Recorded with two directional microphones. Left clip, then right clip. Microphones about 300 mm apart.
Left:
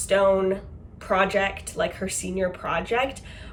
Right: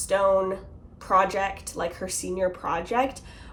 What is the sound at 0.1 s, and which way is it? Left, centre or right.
Speech, centre.